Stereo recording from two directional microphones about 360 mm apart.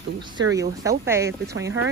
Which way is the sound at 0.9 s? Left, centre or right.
Centre.